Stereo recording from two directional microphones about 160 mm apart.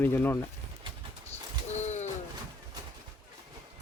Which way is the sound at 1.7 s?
45° left (ahead or behind).